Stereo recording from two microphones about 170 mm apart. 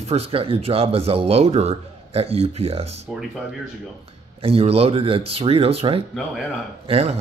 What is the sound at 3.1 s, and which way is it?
Speech, centre (ahead or behind).